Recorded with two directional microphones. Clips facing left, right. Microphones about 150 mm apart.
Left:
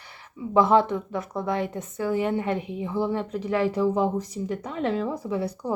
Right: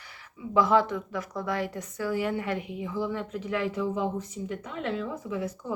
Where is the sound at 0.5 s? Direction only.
25° left (ahead or behind).